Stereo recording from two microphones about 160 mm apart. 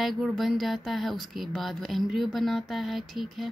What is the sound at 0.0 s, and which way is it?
Speech, centre (ahead or behind).